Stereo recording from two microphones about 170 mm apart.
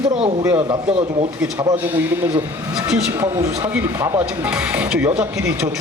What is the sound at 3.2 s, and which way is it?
Speech, 20° right (ahead or behind).